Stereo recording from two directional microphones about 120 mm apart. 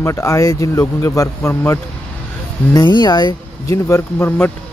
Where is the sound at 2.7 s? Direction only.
35° left (ahead or behind).